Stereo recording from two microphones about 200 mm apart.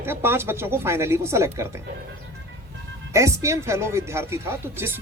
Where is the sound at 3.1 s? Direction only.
15° right (ahead or behind).